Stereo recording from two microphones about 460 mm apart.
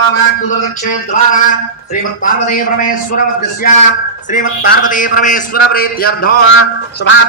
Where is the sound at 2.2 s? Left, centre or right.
Centre.